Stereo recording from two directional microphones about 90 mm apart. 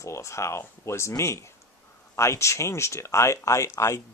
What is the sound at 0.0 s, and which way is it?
Speech, 35° left (ahead or behind).